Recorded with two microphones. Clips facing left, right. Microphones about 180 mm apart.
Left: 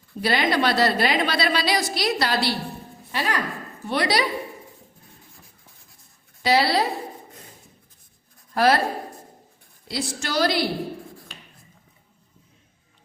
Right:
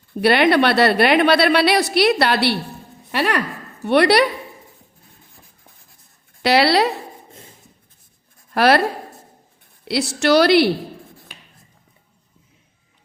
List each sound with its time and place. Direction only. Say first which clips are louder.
0.1 s a woman's voice: right 8 dB; 65° right (ahead or behind)
6.4 s a woman's voice: right 5 dB; 75° right (ahead or behind)
8.5 s a woman's voice: right 4 dB; 70° right (ahead or behind)
9.8 s a woman's voice: right 10 dB; 75° right (ahead or behind)